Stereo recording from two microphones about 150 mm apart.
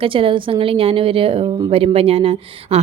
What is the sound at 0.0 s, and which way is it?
A woman's voice, 35° right (ahead or behind).